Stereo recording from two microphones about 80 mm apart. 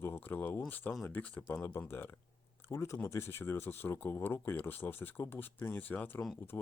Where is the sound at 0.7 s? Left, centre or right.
Left.